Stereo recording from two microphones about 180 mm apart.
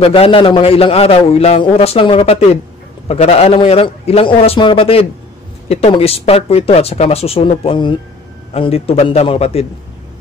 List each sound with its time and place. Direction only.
0.0 s a man's voice: 30° left (ahead or behind)